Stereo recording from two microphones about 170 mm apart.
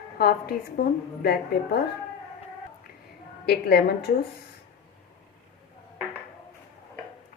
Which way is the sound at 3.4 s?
70° left (ahead or behind).